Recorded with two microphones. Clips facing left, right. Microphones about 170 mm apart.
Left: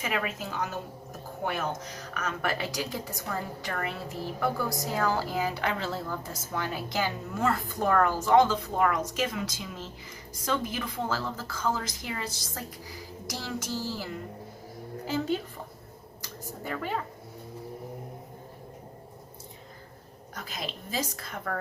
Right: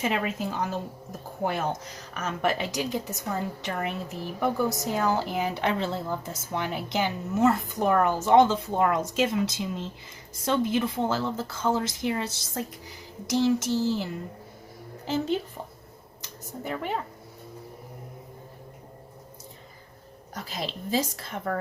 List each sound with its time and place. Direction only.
0.0 s speech: 30° right (ahead or behind)
20.3 s speech: 30° right (ahead or behind)